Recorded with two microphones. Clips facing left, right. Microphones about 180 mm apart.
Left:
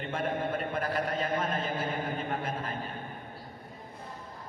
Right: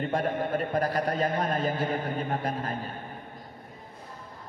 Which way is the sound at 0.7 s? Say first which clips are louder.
Right 4 dB; 40° right (ahead or behind).